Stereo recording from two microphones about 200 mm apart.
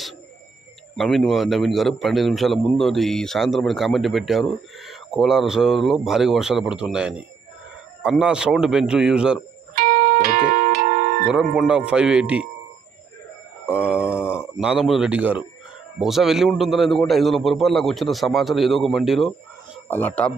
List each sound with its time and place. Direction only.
0.9 s a man's voice: centre (ahead or behind)
9.8 s music: 45° right (ahead or behind)
11.2 s a man's voice: 5° right (ahead or behind)
13.9 s a sound: 10° left (ahead or behind)
14.6 s a man's voice: 5° right (ahead or behind)